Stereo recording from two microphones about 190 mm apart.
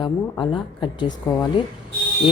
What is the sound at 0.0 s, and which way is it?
A woman's voice, 25° left (ahead or behind).